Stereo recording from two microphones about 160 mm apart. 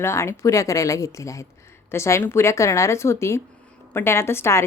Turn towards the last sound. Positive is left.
turn(degrees=15)  # may be behind; listen again after turning